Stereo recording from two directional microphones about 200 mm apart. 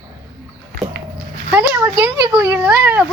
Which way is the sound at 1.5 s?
10° right (ahead or behind).